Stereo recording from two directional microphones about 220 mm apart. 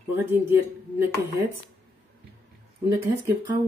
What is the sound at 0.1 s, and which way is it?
Speech, 10° right (ahead or behind).